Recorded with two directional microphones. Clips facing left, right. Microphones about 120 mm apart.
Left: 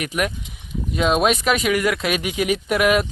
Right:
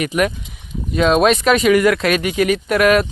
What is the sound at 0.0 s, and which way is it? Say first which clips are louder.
Speech: right 6 dB; centre (ahead or behind).